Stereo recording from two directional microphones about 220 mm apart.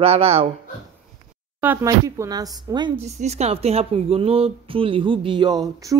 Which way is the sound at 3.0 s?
30° right (ahead or behind).